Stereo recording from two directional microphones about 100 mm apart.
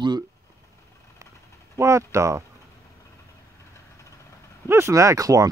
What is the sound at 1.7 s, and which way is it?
Speech, 30° right (ahead or behind).